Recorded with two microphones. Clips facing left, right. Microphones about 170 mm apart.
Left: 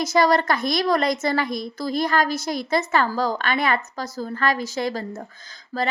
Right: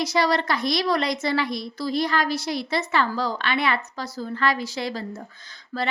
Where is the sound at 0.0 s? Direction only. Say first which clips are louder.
Left 3 dB; 45° left (ahead or behind).